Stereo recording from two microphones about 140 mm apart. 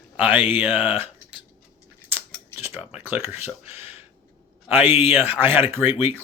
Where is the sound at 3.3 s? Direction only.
15° right (ahead or behind).